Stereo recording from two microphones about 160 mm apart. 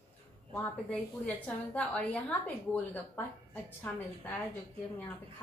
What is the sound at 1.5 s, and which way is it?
A woman's voice, 5° left (ahead or behind).